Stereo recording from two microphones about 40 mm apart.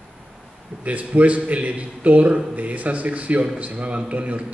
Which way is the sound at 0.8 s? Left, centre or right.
Right.